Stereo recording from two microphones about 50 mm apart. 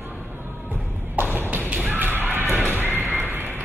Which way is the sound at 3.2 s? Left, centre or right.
Right.